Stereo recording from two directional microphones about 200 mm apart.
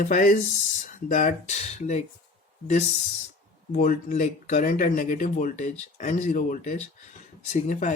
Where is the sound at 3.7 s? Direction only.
40° left (ahead or behind).